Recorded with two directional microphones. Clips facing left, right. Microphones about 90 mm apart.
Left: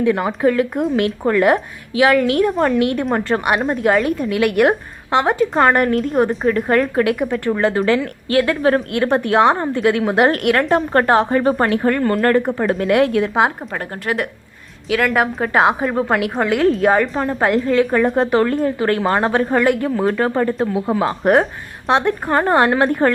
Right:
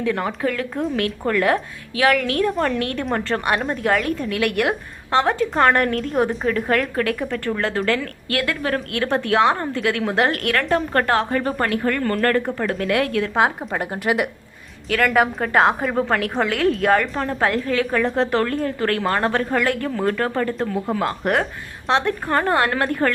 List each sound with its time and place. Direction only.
0.0 s a woman's voice: 10° left (ahead or behind)
2.5 s a woman's voice: 5° left (ahead or behind)
6.9 s a woman's voice: 15° left (ahead or behind)
8.3 s speech: 30° left (ahead or behind)
8.9 s a woman's voice: 15° left (ahead or behind)
13.7 s a woman's voice: 10° right (ahead or behind)
14.8 s a woman's voice: centre (ahead or behind); by 23.1 s 20° left (ahead or behind)